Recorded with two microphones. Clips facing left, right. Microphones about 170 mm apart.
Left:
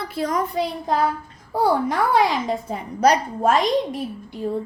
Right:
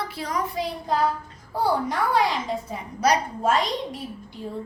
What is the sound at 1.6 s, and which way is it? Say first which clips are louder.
A child's voice: left 4 dB; 55° left (ahead or behind).